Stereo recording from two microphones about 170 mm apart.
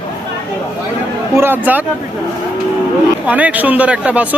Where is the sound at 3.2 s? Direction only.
10° right (ahead or behind).